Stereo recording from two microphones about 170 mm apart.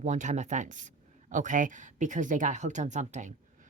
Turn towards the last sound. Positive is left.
turn(degrees=-45)  # may be behind; listen again after turning